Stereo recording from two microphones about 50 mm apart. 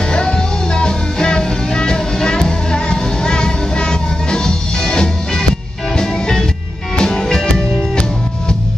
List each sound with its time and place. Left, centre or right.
0.1 s music: centre